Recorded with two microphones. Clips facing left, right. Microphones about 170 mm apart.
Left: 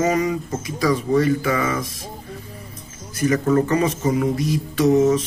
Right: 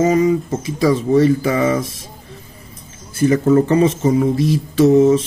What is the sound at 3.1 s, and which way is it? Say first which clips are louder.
Speech: right 5 dB; 30° right (ahead or behind).